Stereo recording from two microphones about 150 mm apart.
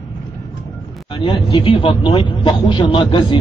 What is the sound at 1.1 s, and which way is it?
Speech, 35° left (ahead or behind).